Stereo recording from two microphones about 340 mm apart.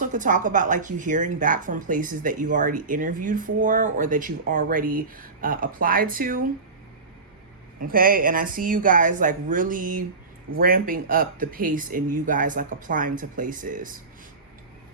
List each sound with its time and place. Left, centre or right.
0.0 s a woman's voice: right
7.8 s a woman's voice: right